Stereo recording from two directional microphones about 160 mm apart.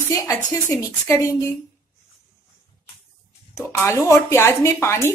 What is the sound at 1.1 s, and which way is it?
Speech, 15° left (ahead or behind).